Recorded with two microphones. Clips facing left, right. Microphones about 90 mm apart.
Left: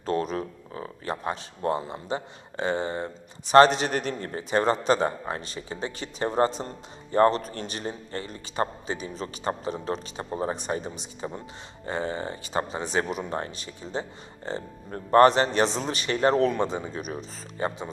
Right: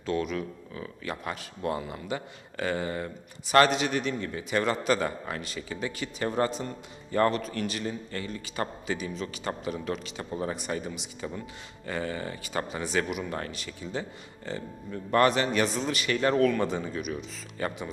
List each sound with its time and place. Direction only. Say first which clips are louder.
0.0 s a man's voice: left 2 dB; 40° left (ahead or behind)
14.8 s a man's voice: left 6 dB; 40° left (ahead or behind); by 17.0 s 20° left (ahead or behind)
17.0 s a man's voice: even; 35° left (ahead or behind)